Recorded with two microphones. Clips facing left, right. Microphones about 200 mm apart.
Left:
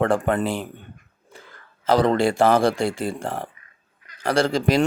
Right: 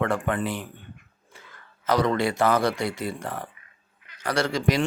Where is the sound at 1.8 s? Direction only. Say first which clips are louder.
Left 4 dB; 30° left (ahead or behind).